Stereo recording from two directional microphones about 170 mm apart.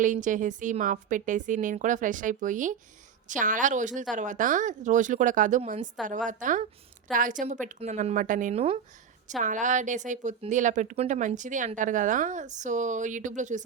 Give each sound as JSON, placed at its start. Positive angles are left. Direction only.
{"t": 0.0, "sound": "speech", "side_deg": -50}